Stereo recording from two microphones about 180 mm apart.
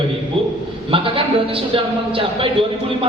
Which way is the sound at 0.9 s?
30° right (ahead or behind).